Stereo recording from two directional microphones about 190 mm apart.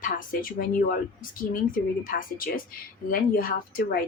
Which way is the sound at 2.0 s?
45° left (ahead or behind).